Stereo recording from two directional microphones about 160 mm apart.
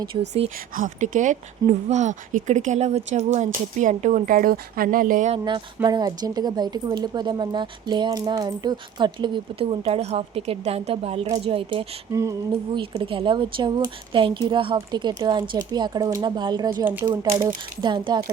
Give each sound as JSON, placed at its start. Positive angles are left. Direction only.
{"t": 0.1, "sound": "speech", "side_deg": -30}
{"t": 0.8, "sound": "speech", "side_deg": -50}
{"t": 5.3, "sound": "speech", "side_deg": -30}
{"t": 16.8, "sound": "speech", "side_deg": -10}
{"t": 17.8, "sound": "speech", "side_deg": -30}